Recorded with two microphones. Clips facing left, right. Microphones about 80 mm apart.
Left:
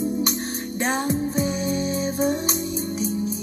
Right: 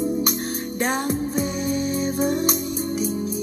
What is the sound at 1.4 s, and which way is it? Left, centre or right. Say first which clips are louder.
Music: even; centre.